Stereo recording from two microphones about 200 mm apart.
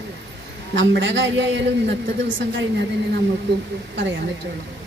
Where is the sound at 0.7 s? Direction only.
60° right (ahead or behind).